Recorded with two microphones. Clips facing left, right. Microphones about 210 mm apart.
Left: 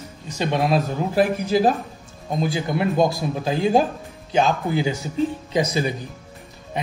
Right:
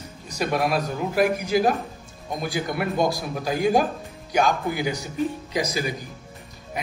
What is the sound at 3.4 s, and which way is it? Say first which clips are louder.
A man's voice: left 2 dB; 25° left (ahead or behind).